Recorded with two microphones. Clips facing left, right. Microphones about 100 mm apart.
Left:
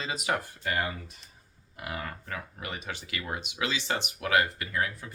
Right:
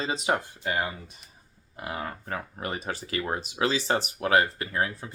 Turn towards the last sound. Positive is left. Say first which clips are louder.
# right 3 dB
turn(degrees=-30)  # may be behind; listen again after turning